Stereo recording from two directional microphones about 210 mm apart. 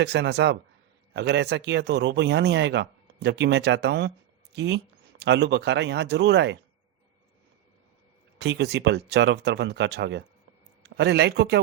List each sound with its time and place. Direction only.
0.0 s speech: 55° right (ahead or behind)
8.4 s speech: 55° right (ahead or behind)